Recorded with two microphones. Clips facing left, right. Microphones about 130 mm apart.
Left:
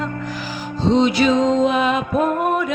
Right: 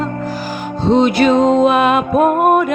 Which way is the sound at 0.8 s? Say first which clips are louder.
Right 4 dB; 55° right (ahead or behind).